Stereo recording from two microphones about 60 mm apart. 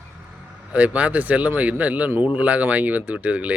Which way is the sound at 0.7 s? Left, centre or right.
Right.